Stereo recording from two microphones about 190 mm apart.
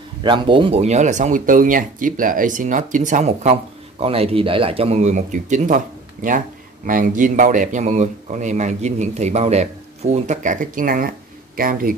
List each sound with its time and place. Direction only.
0.2 s speech: 25° right (ahead or behind); by 5.8 s 40° right (ahead or behind)
6.9 s speech: 45° right (ahead or behind)